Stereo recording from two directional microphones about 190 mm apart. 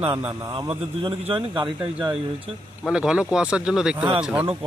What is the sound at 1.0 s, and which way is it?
Speech, 25° right (ahead or behind).